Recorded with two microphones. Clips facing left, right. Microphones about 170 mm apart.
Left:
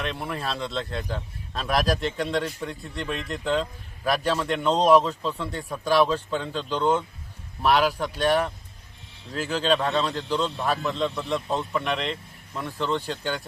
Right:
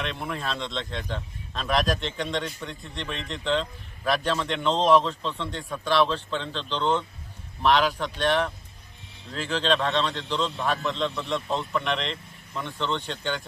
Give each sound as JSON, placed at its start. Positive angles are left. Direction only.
{"t": 0.0, "sound": "speech", "side_deg": 5}